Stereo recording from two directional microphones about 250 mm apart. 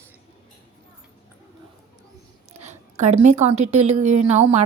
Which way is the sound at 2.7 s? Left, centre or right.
Right.